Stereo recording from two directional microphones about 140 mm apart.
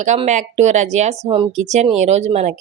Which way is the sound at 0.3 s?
55° right (ahead or behind).